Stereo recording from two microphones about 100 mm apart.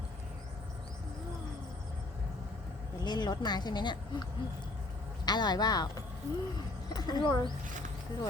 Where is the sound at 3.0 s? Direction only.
45° left (ahead or behind).